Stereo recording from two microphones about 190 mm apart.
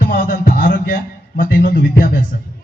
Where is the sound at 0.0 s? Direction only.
50° left (ahead or behind).